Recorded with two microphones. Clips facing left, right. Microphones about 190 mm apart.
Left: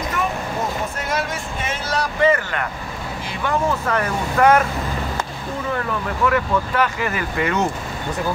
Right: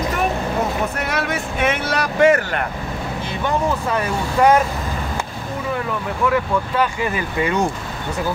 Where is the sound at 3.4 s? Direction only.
15° right (ahead or behind).